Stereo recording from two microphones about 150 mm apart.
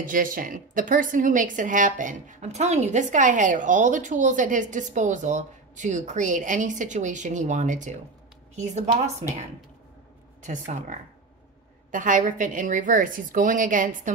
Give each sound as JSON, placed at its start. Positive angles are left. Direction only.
{"t": 0.0, "sound": "a woman's voice", "side_deg": -65}
{"t": 10.4, "sound": "a woman's voice", "side_deg": -55}